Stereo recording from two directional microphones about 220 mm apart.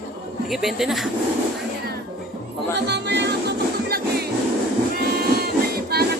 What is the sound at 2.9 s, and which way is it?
Music, 50° right (ahead or behind).